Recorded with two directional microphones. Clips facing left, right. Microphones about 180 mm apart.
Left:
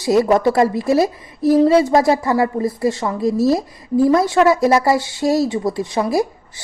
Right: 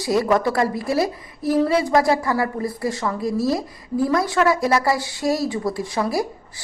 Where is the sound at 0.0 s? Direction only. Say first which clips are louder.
Left 5 dB; 25° left (ahead or behind).